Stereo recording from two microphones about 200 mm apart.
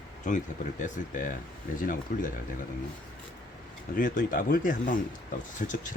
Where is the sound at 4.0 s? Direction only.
45° left (ahead or behind).